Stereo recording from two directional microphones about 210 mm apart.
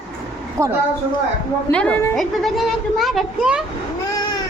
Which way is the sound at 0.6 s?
15° right (ahead or behind).